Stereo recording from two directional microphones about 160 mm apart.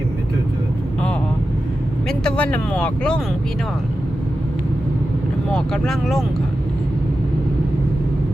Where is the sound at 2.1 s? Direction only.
5° left (ahead or behind).